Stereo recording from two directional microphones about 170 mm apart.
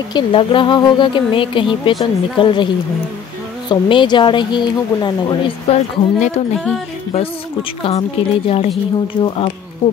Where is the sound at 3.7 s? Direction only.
25° left (ahead or behind).